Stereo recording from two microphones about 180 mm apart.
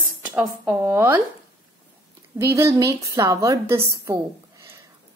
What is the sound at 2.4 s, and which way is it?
Speech, 15° right (ahead or behind).